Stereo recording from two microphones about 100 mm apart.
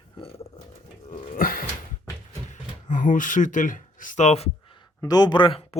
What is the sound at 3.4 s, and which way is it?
Speech, 90° left.